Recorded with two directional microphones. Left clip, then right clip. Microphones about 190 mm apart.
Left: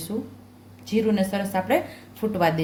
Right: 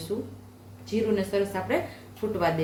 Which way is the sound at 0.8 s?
55° left (ahead or behind).